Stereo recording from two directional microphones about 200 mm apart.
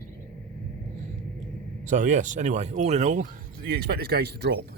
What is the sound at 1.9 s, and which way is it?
Speech, 40° right (ahead or behind).